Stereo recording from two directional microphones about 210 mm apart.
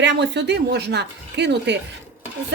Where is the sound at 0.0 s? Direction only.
55° right (ahead or behind).